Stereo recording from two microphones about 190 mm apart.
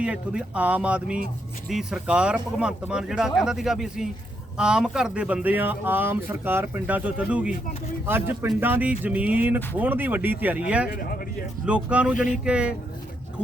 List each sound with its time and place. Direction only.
0.0 s speech: 5° right (ahead or behind)
10.9 s speech: 50° left (ahead or behind)
11.6 s speech: 5° right (ahead or behind)